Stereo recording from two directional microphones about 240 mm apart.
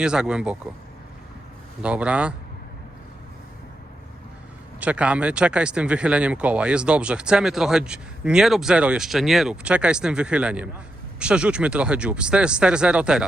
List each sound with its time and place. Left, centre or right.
0.0 s speech: centre
1.8 s speech: centre
4.8 s speech: centre